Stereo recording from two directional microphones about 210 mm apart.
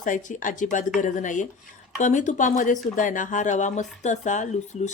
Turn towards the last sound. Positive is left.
turn(degrees=35)  # may be behind; listen again after turning